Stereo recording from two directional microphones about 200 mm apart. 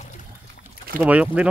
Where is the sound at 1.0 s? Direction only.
5° right (ahead or behind).